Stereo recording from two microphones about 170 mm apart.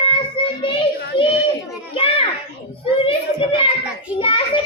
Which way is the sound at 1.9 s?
35° left (ahead or behind).